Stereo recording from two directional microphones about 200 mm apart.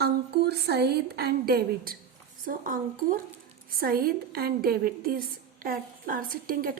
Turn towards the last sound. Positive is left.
turn(degrees=-45)  # may be behind; listen again after turning